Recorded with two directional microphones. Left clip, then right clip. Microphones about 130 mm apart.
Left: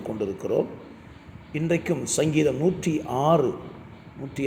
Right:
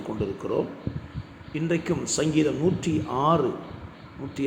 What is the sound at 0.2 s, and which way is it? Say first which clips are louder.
Speech: left 2 dB; 50° left (ahead or behind).